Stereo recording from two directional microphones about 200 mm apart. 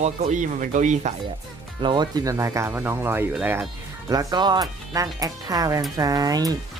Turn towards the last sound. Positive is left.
turn(degrees=-20)  # may be behind; listen again after turning